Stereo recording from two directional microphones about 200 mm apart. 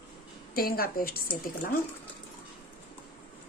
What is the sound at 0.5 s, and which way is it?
A woman's voice, 45° left (ahead or behind).